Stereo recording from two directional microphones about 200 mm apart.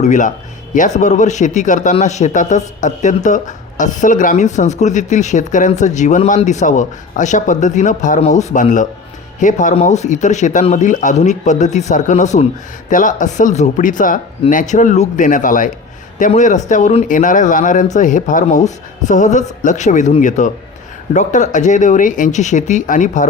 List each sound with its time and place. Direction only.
0.0 s a man's voice: 40° left (ahead or behind)